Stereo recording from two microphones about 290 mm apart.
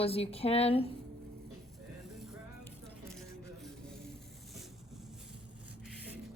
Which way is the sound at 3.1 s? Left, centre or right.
Centre.